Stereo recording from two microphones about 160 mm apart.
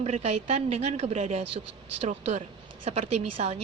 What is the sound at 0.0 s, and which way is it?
A woman's voice, 45° right (ahead or behind).